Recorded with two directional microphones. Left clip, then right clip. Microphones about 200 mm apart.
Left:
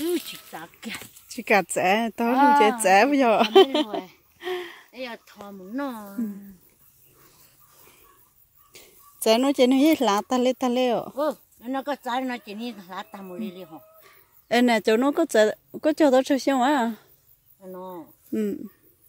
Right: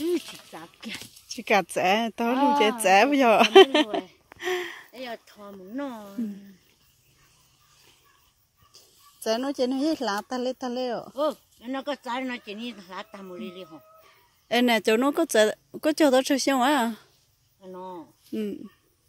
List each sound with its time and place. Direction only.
0.0 s speech: 10° left (ahead or behind); by 4.0 s 5° right (ahead or behind)
4.4 s gasp: 5° right (ahead or behind)
4.9 s speech: 35° left (ahead or behind)
8.7 s speech: 35° left (ahead or behind)
11.1 s speech: 20° left (ahead or behind)
14.5 s speech: 10° left (ahead or behind)